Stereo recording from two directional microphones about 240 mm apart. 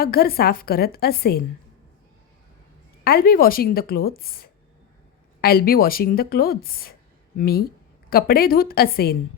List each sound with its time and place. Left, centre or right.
0.0 s speech: left
3.0 s speech: left